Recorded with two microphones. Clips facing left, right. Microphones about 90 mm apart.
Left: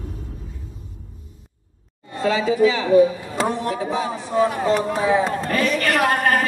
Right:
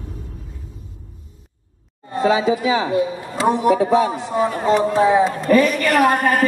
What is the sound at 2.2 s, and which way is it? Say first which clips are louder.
Speech: right 1 dB; 20° right (ahead or behind).